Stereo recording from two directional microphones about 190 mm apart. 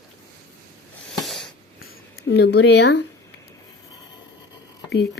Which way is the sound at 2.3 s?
65° left (ahead or behind).